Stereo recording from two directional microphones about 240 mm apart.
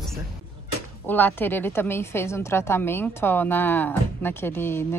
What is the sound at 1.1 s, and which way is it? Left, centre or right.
A woman's voice, centre.